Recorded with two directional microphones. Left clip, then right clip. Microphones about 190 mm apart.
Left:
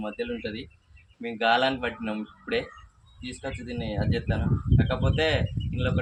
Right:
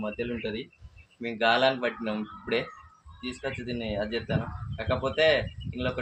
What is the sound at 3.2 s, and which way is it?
Speech, 20° right (ahead or behind).